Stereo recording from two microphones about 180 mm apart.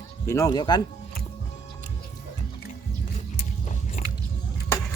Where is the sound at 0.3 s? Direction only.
20° left (ahead or behind).